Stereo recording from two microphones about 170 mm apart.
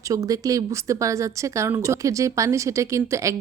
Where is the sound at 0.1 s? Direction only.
20° right (ahead or behind).